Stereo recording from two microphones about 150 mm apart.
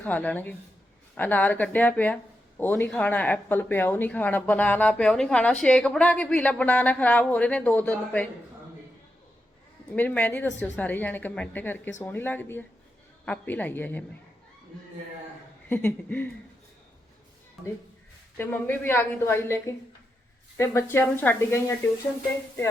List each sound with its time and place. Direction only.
0.0 s speech: 10° left (ahead or behind)
9.9 s speech: 10° left (ahead or behind)
15.7 s speech: 15° left (ahead or behind)
18.3 s speech: 15° left (ahead or behind)